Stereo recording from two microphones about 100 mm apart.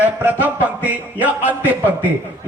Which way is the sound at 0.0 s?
15° right (ahead or behind).